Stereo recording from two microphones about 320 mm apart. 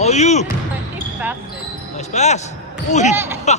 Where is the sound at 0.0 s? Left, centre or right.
Left.